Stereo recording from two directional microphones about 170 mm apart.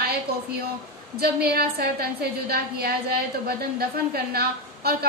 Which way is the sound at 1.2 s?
65° right (ahead or behind).